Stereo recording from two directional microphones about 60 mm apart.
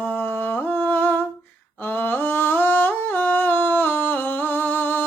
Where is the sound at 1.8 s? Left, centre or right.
Left.